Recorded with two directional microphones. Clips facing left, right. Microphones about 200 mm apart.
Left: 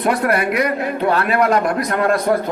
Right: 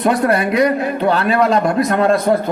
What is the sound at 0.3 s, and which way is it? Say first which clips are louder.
A man's voice: right 3 dB; 30° right (ahead or behind).